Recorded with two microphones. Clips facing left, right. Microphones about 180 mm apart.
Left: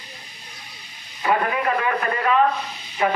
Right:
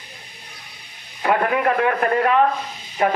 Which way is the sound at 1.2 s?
60° right (ahead or behind).